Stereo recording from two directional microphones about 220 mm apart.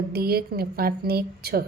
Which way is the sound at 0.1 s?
45° right (ahead or behind).